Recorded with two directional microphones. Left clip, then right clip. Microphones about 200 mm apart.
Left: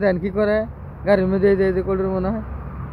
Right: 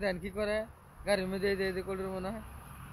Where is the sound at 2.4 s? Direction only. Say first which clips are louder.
Left 14 dB; 70° right (ahead or behind).